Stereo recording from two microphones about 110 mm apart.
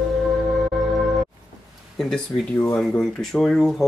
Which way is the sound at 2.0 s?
5° left (ahead or behind).